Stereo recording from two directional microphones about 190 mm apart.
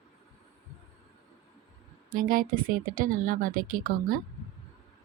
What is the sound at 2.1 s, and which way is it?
Speech, 50° right (ahead or behind).